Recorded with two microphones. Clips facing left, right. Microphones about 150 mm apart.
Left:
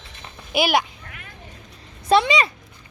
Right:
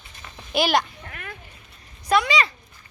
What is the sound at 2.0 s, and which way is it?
Speech, 25° left (ahead or behind).